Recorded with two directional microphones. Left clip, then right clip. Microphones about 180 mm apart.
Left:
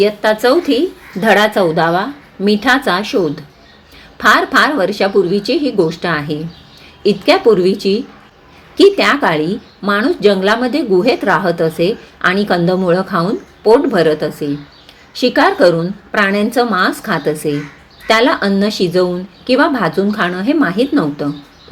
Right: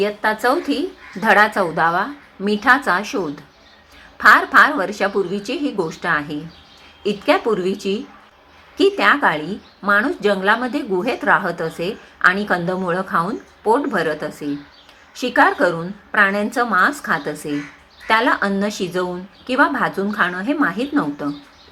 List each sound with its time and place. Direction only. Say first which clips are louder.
0.0 s a woman's voice: left 6 dB; 30° left (ahead or behind)